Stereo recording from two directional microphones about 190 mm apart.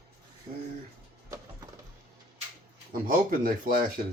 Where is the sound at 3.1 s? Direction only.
50° right (ahead or behind).